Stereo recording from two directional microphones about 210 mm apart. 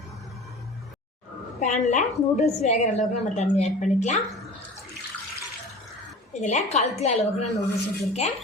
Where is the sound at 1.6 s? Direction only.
35° left (ahead or behind).